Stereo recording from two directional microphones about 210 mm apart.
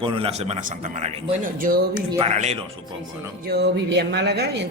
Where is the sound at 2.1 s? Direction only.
30° right (ahead or behind).